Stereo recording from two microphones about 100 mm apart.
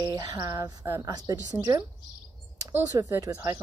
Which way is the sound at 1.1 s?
40° right (ahead or behind).